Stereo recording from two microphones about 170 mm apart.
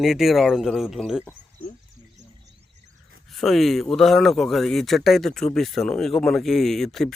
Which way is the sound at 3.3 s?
Centre (ahead or behind).